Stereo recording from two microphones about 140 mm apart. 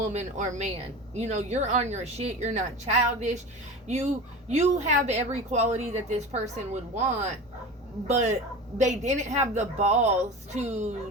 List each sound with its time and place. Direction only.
0.0 s a woman's voice: 55° right (ahead or behind)